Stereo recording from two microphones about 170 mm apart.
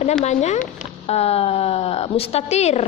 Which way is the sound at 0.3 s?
40° left (ahead or behind).